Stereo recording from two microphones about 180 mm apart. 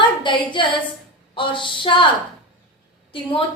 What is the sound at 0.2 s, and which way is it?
A woman's voice, 25° left (ahead or behind).